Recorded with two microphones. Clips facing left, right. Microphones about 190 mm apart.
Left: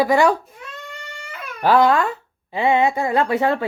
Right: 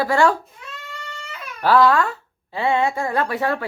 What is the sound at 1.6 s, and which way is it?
A woman's voice, 20° left (ahead or behind).